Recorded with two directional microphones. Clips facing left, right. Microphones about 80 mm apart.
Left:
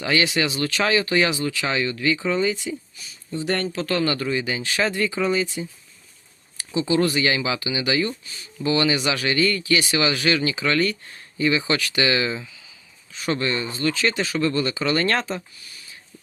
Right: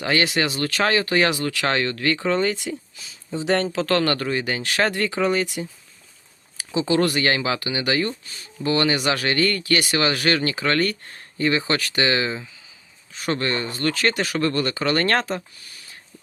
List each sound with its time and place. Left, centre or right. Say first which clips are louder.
0.0 s speech: even; right
1.4 s speech: right 1 dB; right
3.0 s speech: right 1 dB; right
6.7 s speech: even; right
13.1 s speech: even; right
15.6 s a sound: even; right